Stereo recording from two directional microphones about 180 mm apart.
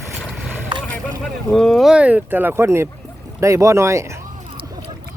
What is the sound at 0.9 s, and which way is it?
Speech, 5° left (ahead or behind).